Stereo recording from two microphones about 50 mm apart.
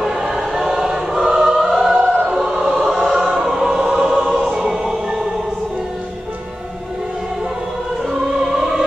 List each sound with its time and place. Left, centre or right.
0.2 s choir: centre
8.5 s opera: centre